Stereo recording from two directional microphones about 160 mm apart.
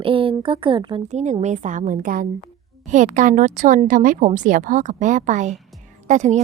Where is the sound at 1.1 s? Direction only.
45° right (ahead or behind).